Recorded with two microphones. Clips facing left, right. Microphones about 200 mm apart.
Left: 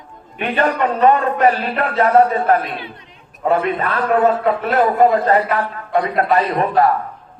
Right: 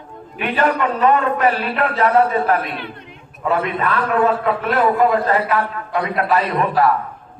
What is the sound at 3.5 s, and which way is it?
A man's voice, 35° left (ahead or behind).